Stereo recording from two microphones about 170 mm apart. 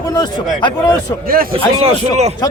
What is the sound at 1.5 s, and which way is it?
Speech, 35° right (ahead or behind).